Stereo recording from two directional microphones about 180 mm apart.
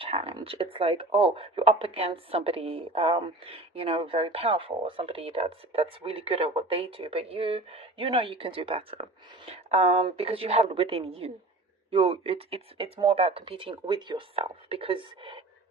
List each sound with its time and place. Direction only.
0.0 s speech: 35° right (ahead or behind)